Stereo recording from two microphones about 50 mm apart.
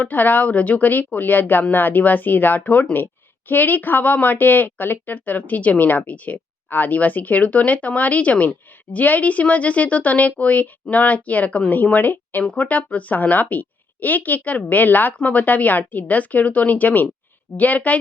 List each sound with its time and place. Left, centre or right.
0.0 s speech: left